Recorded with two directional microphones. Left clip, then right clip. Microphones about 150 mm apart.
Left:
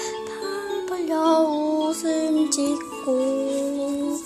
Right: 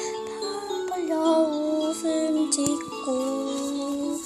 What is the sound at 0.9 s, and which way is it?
Music, 20° left (ahead or behind).